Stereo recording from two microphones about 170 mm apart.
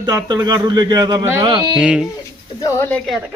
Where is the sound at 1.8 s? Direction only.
5° right (ahead or behind).